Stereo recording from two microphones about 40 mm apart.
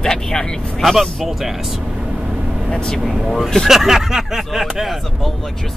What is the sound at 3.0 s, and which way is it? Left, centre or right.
Speech, centre.